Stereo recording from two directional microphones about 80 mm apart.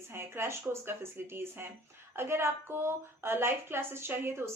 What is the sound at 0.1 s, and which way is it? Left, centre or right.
A woman's voice, right.